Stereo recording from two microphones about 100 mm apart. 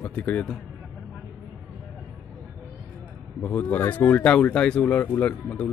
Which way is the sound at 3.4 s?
15° left (ahead or behind).